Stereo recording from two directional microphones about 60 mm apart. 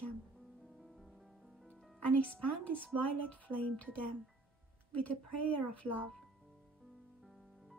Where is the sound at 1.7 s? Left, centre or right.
Left.